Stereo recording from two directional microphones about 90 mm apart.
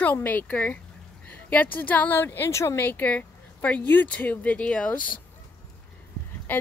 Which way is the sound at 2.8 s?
20° left (ahead or behind).